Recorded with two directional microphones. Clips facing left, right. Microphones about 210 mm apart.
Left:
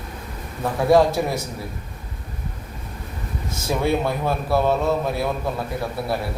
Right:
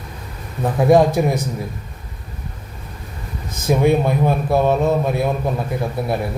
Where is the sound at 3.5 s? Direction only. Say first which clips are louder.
Right 6 dB; 15° right (ahead or behind).